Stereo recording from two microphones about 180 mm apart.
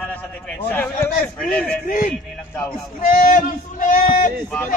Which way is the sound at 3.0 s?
50° left (ahead or behind).